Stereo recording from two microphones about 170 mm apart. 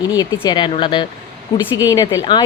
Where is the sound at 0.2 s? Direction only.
25° left (ahead or behind).